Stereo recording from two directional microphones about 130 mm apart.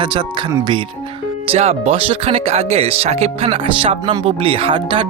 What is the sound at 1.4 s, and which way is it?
Speech, 55° right (ahead or behind).